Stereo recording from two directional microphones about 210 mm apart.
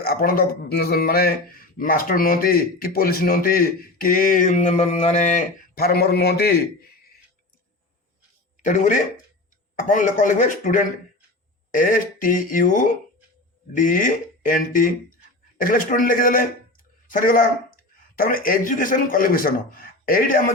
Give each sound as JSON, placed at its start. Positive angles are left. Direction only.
{"t": 0.0, "sound": "speech", "side_deg": 45}
{"t": 8.6, "sound": "speech", "side_deg": 35}